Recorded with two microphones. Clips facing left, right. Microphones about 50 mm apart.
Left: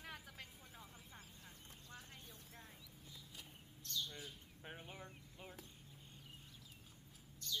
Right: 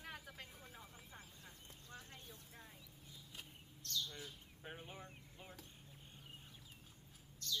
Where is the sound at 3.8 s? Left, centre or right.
Centre.